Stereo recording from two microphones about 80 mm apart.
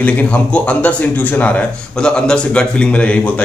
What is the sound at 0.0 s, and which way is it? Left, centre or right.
Speech, centre.